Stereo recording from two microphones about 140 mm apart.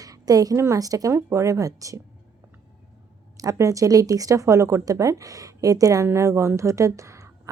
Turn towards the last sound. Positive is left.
turn(degrees=-20)  # may be behind; listen again after turning